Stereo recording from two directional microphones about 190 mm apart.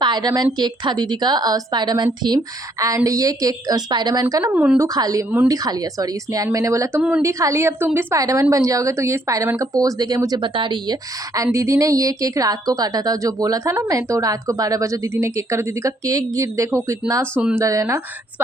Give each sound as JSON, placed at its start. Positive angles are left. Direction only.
{"t": 0.0, "sound": "a woman's voice", "side_deg": -20}
{"t": 4.5, "sound": "a woman's voice", "side_deg": -5}
{"t": 4.9, "sound": "a woman's voice", "side_deg": -20}